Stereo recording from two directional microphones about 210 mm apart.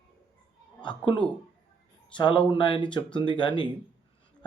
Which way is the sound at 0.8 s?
20° left (ahead or behind).